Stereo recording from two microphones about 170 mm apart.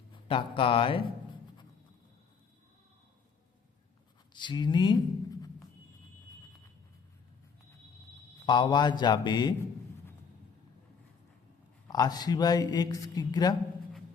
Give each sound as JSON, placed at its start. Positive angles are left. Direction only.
{"t": 0.1, "sound": "speech", "side_deg": 30}
{"t": 4.4, "sound": "speech", "side_deg": 25}
{"t": 8.4, "sound": "speech", "side_deg": 25}
{"t": 11.9, "sound": "speech", "side_deg": 25}